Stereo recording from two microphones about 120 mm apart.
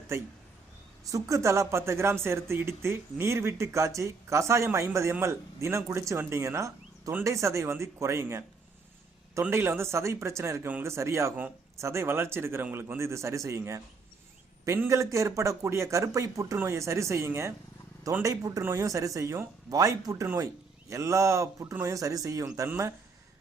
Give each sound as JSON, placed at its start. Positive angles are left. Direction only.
{"t": 1.1, "sound": "speech", "side_deg": -25}